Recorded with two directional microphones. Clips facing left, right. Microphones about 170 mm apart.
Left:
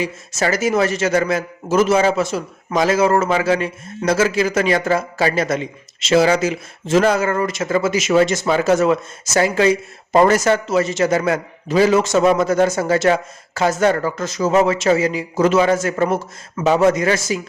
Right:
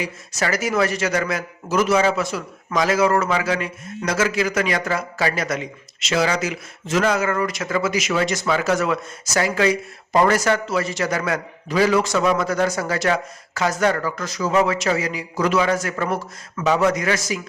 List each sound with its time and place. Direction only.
0.0 s a man's voice: 25° left (ahead or behind)